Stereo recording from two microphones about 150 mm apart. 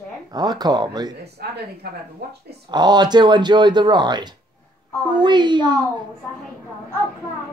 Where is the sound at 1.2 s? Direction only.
90° right.